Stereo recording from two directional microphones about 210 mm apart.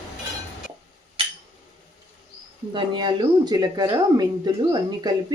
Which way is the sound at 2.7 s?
20° right (ahead or behind).